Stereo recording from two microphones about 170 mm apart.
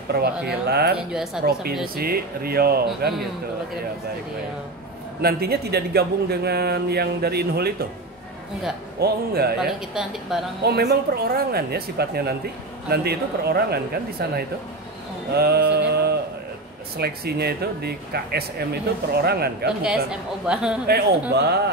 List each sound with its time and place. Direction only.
0.5 s speech: 70° right (ahead or behind)
0.9 s a woman's voice: 5° right (ahead or behind)
1.4 s speech: 65° right (ahead or behind)
5.2 s speech: 65° right (ahead or behind)
9.0 s speech: 65° right (ahead or behind)
9.6 s a woman's voice: 5° right (ahead or behind)
10.6 s speech: 70° right (ahead or behind)
15.3 s mantra: 70° right (ahead or behind)
16.9 s speech: 70° right (ahead or behind)
19.8 s a woman's voice: 5° right (ahead or behind)
20.8 s speech: 70° right (ahead or behind)